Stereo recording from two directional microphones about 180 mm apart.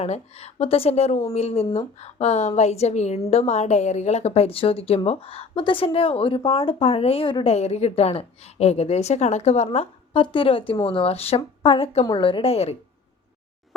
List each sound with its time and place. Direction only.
0.0 s a woman's voice: 35° left (ahead or behind)